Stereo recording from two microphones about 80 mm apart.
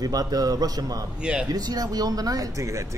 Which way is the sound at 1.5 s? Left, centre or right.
Right.